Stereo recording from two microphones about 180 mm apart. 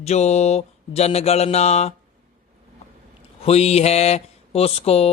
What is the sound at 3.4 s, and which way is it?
Speech, 35° left (ahead or behind).